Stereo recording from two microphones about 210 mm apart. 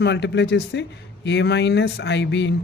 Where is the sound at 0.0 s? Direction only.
55° left (ahead or behind).